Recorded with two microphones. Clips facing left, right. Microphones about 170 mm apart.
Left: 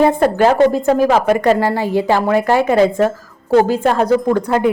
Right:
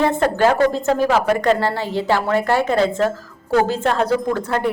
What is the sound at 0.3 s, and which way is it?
A woman's voice, 15° left (ahead or behind).